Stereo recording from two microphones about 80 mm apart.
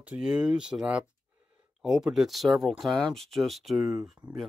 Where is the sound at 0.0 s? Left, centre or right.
Centre.